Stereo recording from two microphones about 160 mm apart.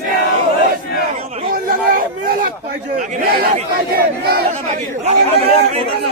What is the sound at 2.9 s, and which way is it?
Speech, 50° right (ahead or behind).